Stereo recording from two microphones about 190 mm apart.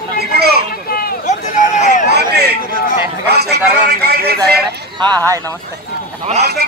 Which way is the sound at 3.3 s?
60° right (ahead or behind).